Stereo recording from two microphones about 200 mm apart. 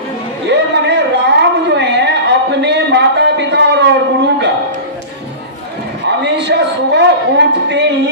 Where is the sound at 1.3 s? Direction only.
60° right (ahead or behind).